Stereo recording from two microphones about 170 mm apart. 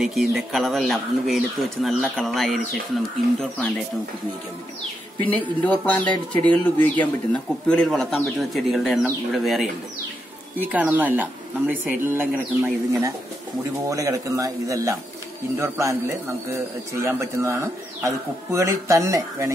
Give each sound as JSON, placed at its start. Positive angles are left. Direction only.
{"t": 0.0, "sound": "speech", "side_deg": 0}
{"t": 5.3, "sound": "a man's voice", "side_deg": 10}